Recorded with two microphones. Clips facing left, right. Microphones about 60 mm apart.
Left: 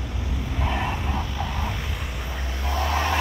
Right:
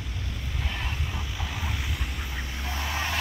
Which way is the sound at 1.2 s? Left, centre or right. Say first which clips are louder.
Left 6 dB; centre.